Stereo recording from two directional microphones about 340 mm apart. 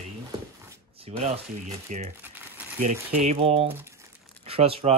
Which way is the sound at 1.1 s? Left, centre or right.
Centre.